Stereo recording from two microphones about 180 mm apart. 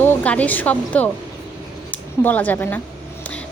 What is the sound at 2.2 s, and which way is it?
Speech, 10° left (ahead or behind).